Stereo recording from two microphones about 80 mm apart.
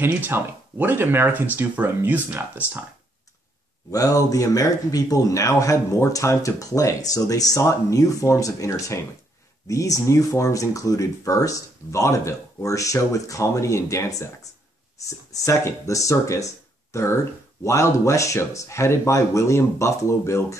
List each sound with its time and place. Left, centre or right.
0.0 s speech: right
3.9 s a man's voice: left